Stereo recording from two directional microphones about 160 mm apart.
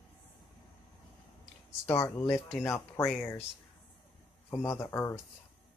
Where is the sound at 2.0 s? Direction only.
15° left (ahead or behind).